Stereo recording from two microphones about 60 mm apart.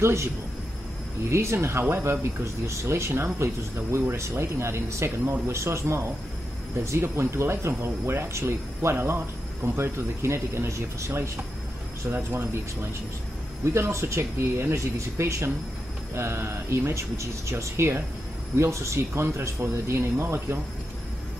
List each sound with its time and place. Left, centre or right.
0.0 s speech: right
1.3 s speech: right
12.1 s speech: right
13.7 s speech: right